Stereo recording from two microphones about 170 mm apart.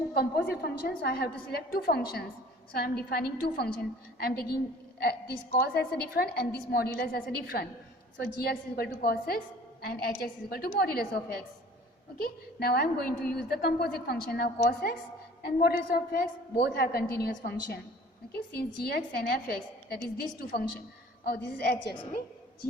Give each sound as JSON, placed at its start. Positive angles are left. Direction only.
{"t": 0.2, "sound": "a woman's voice", "side_deg": 70}
{"t": 5.5, "sound": "a woman's voice", "side_deg": 70}
{"t": 21.2, "sound": "a woman's voice", "side_deg": 75}